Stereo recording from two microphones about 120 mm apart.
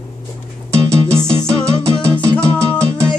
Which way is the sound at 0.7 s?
25° right (ahead or behind).